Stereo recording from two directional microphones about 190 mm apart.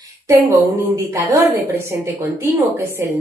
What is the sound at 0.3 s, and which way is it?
A woman's voice, 15° right (ahead or behind).